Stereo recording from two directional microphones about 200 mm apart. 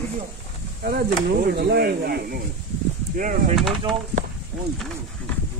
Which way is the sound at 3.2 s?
40° right (ahead or behind).